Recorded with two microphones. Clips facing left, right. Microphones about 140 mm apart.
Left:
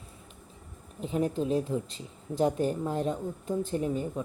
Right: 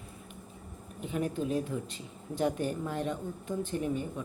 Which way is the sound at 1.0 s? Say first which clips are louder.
Left 4 dB; 30° left (ahead or behind).